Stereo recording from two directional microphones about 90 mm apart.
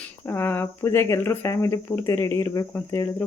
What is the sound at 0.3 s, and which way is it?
A woman's voice, 25° left (ahead or behind).